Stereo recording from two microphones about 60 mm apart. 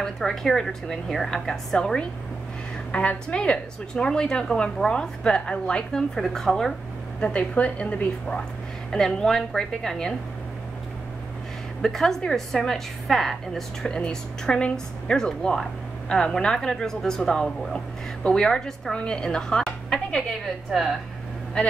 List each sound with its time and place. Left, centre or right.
0.0 s a woman's voice: centre
7.2 s a woman's voice: centre
8.9 s a woman's voice: centre
11.8 s a woman's voice: centre
20.4 s a woman's voice: centre